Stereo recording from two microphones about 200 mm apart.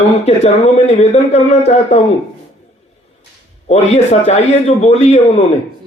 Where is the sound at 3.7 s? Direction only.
35° left (ahead or behind).